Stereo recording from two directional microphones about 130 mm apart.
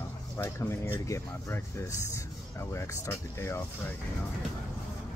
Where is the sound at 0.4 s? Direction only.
20° left (ahead or behind).